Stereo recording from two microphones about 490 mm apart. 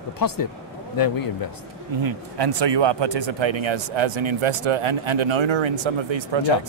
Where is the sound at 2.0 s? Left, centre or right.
Right.